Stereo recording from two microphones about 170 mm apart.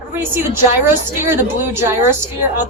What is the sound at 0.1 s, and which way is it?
A woman's voice, 15° right (ahead or behind).